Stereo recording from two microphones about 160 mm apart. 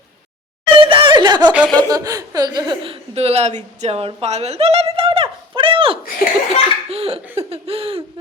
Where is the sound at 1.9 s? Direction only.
20° right (ahead or behind).